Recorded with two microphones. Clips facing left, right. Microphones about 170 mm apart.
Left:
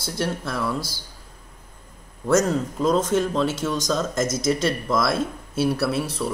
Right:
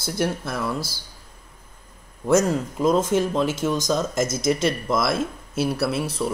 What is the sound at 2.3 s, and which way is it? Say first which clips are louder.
Speech: right 1 dB; 5° right (ahead or behind).